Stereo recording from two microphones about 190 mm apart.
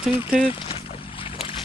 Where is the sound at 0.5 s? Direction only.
30° left (ahead or behind).